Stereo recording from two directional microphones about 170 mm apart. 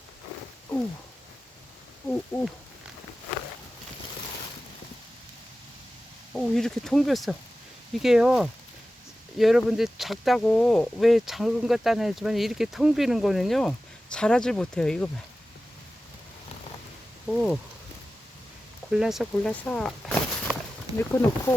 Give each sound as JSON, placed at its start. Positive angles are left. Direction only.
{"t": 2.0, "sound": "speech", "side_deg": 10}
{"t": 6.3, "sound": "speech", "side_deg": 0}
{"t": 17.2, "sound": "speech", "side_deg": 0}
{"t": 18.9, "sound": "speech", "side_deg": -5}
{"t": 21.0, "sound": "speech", "side_deg": 15}